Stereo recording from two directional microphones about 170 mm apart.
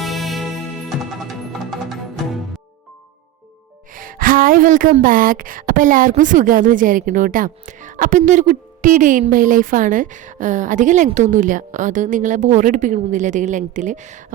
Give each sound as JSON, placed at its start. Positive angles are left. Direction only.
{"t": 0.0, "sound": "music", "side_deg": 0}
{"t": 3.9, "sound": "speech", "side_deg": -55}